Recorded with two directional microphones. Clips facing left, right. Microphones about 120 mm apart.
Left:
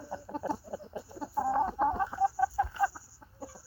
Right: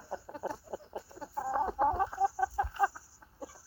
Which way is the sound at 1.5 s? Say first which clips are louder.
Left 1 dB; 5° right (ahead or behind).